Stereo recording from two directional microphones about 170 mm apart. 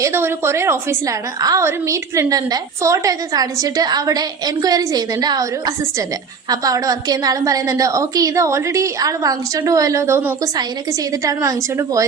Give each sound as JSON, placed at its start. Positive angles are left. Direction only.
{"t": 0.0, "sound": "a woman's voice", "side_deg": -15}